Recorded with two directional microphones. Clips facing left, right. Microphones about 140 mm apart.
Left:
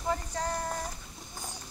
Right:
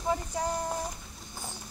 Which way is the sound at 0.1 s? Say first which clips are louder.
Right 2 dB; 15° right (ahead or behind).